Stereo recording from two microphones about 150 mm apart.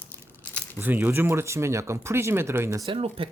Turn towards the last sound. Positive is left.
turn(degrees=-40)  # may be behind; listen again after turning